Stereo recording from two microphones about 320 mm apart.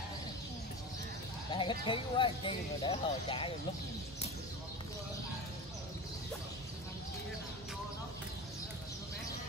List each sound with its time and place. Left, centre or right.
1.5 s speech: centre